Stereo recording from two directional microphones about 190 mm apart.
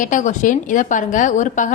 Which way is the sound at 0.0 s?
40° left (ahead or behind).